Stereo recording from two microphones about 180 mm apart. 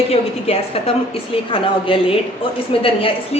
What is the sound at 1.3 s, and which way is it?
A woman's voice, 30° left (ahead or behind).